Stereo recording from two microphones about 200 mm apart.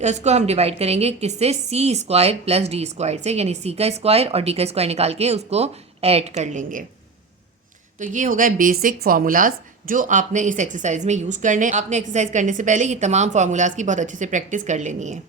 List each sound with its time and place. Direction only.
0.0 s speech: 35° right (ahead or behind)
7.9 s speech: 40° right (ahead or behind)